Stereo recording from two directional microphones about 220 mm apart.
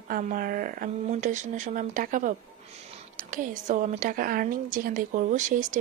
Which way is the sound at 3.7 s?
35° right (ahead or behind).